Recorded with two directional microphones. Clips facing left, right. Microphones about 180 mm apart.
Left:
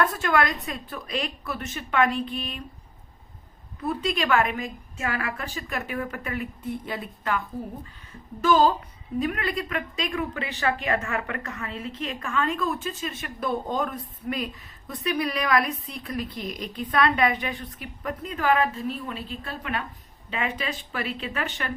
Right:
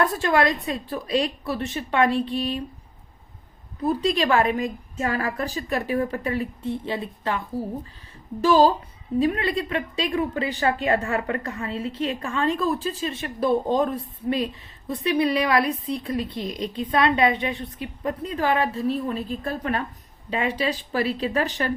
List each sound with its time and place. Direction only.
0.0 s a woman's voice: 30° right (ahead or behind)
3.8 s a woman's voice: 35° right (ahead or behind)